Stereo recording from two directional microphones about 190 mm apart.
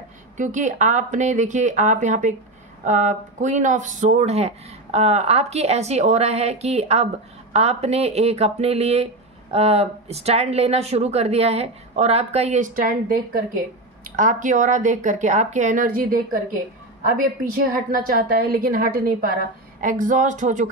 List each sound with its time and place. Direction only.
0.4 s speech: 40° right (ahead or behind)
17.2 s a woman's voice: 45° right (ahead or behind)